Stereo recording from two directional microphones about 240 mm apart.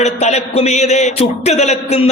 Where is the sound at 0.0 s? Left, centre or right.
Left.